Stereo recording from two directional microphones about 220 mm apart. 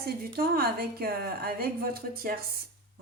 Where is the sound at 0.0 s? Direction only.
45° right (ahead or behind).